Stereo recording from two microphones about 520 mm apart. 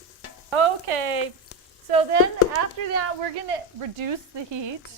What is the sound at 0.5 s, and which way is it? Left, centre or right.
Speech, right.